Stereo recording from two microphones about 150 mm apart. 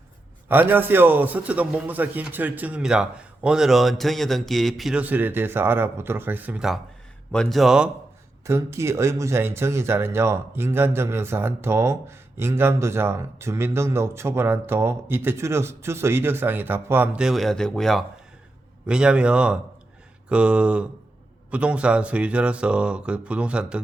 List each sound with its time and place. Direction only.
0.4 s speech: 15° right (ahead or behind)
8.4 s speech: 20° right (ahead or behind)